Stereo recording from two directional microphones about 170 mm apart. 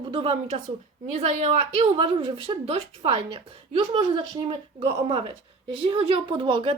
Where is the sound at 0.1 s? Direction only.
35° right (ahead or behind).